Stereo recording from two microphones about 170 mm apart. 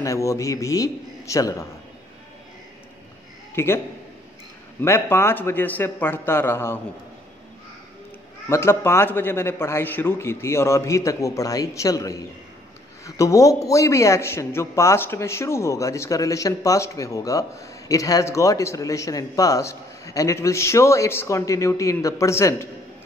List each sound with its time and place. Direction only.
0.0 s a man's voice: 20° left (ahead or behind)
3.5 s a man's voice: 15° left (ahead or behind)
4.8 s a man's voice: 15° left (ahead or behind)
8.5 s a man's voice: 15° left (ahead or behind)